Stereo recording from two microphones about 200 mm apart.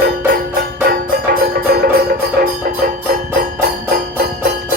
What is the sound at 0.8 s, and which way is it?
Music, 50° right (ahead or behind).